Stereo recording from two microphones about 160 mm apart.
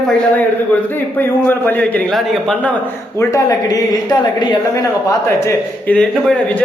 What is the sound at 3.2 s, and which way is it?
Speech, 20° left (ahead or behind).